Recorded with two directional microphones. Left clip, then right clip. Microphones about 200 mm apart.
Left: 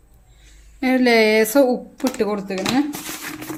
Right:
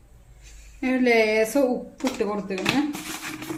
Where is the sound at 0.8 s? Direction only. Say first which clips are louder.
Left 5 dB; 50° left (ahead or behind).